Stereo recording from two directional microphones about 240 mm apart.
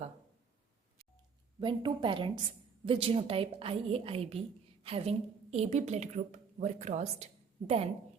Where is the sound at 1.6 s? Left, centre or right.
Right.